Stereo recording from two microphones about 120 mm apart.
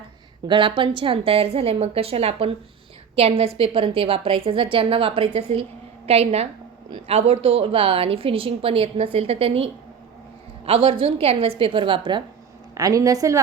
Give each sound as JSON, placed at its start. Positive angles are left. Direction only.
{"t": 0.4, "sound": "a woman's voice", "side_deg": -45}
{"t": 10.7, "sound": "a woman's voice", "side_deg": -50}
{"t": 12.7, "sound": "a woman's voice", "side_deg": -30}